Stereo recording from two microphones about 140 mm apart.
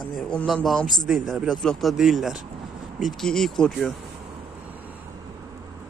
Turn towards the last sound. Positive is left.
turn(degrees=-15)  # may be behind; listen again after turning